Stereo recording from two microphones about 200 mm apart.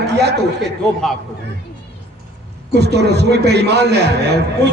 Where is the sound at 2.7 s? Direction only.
55° right (ahead or behind).